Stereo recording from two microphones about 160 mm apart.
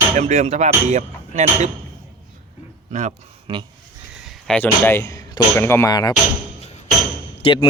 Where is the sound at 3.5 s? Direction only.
30° right (ahead or behind).